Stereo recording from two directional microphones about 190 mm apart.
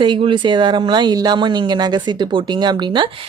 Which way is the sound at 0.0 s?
25° right (ahead or behind).